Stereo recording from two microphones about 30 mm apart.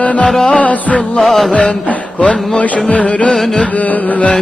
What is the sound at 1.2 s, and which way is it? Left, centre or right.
Music, centre.